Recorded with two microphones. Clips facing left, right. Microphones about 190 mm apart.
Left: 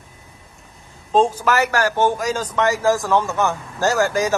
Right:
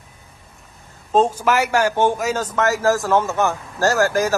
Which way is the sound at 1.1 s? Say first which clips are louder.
Even; 10° right (ahead or behind).